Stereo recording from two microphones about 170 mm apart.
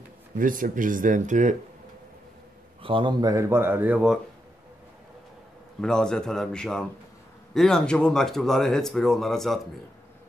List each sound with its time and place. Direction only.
0.4 s speech: 50° right (ahead or behind)
2.8 s speech: 30° right (ahead or behind); by 4.2 s 5° right (ahead or behind)
5.8 s speech: 5° left (ahead or behind)